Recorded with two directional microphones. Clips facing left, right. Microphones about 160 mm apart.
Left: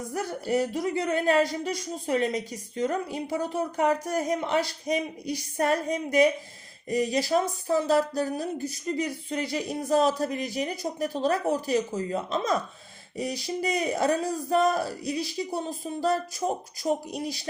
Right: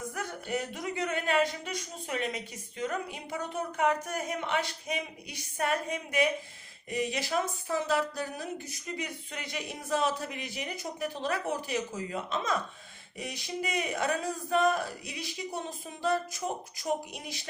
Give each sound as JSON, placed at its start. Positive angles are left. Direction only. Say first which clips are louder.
{"t": 0.1, "sound": "speech", "louder": "left 10 dB", "side_deg": 35}